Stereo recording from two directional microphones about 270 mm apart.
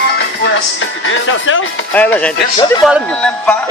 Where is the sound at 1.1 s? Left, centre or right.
Left.